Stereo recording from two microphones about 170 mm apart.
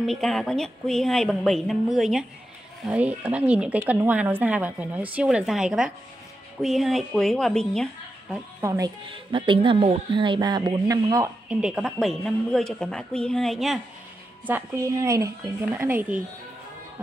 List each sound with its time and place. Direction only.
0.0 s speech: centre (ahead or behind)
8.5 s speech: 20° right (ahead or behind)
9.0 s speech: 30° right (ahead or behind)
11.4 s speech: 5° right (ahead or behind)
14.4 s speech: 15° right (ahead or behind)